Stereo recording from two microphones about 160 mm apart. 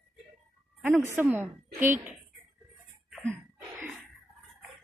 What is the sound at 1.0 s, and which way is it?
A woman's voice, 10° right (ahead or behind).